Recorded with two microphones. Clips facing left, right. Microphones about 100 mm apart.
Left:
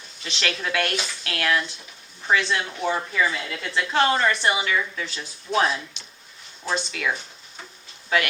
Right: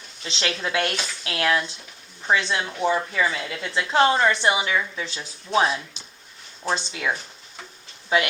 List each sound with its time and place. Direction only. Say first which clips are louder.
0.3 s a woman's voice: even; 25° right (ahead or behind)
6.7 s a woman's voice: right 1 dB; 25° right (ahead or behind)
8.1 s a woman's voice: right 2 dB; 25° right (ahead or behind)